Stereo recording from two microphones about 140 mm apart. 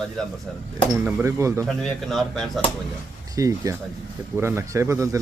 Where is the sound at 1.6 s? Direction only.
Centre (ahead or behind).